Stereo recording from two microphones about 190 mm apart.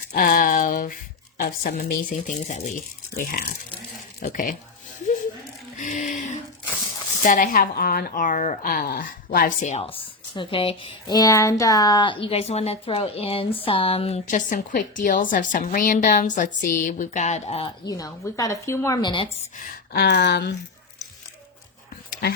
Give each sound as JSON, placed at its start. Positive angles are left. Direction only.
{"t": 0.1, "sound": "a sound", "side_deg": 45}
{"t": 1.4, "sound": "a woman's voice", "side_deg": 50}
{"t": 4.2, "sound": "a woman's voice", "side_deg": 45}
{"t": 5.7, "sound": "a sound", "side_deg": 40}
{"t": 7.2, "sound": "a woman's voice", "side_deg": 45}
{"t": 10.3, "sound": "speech", "side_deg": 25}
{"t": 17.8, "sound": "a woman's voice", "side_deg": 20}
{"t": 19.5, "sound": "speech", "side_deg": 50}